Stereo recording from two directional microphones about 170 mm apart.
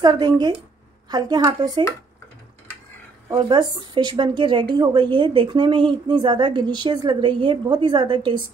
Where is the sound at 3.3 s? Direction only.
25° right (ahead or behind).